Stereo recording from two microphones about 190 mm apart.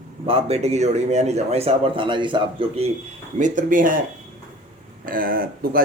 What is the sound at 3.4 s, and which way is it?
Speech, 45° right (ahead or behind).